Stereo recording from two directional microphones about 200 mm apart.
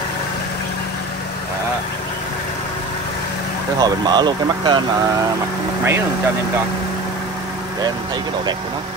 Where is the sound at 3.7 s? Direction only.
20° right (ahead or behind).